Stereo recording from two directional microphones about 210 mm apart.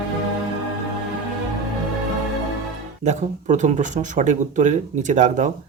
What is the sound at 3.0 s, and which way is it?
Speech, 35° right (ahead or behind).